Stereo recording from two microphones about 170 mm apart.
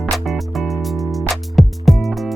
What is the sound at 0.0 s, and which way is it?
Music, centre (ahead or behind).